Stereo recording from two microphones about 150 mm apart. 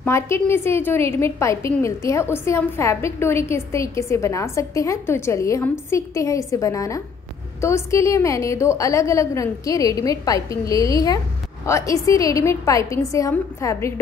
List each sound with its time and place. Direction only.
0.0 s a woman's voice: 15° left (ahead or behind)